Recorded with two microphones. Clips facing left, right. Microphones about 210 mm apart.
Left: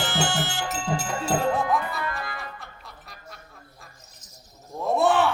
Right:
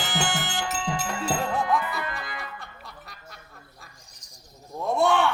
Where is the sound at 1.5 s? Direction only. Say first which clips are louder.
Even; centre (ahead or behind).